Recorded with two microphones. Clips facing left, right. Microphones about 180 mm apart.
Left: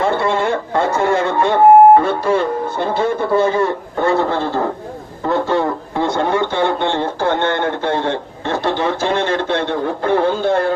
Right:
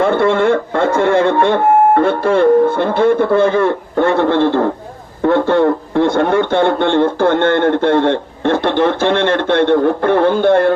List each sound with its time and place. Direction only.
0.0 s speech: 55° right (ahead or behind)